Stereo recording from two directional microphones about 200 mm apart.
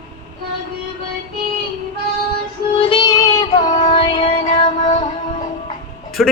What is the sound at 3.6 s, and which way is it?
Music, 40° left (ahead or behind).